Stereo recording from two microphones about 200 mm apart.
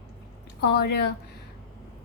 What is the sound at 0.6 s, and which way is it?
Speech, 55° left (ahead or behind).